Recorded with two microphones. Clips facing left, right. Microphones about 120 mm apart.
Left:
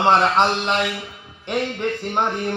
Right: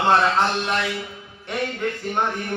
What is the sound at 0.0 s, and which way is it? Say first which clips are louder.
Speech: left 2 dB; 20° left (ahead or behind).